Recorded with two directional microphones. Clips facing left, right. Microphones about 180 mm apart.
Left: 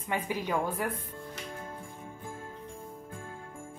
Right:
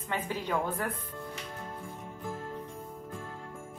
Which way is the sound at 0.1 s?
10° left (ahead or behind).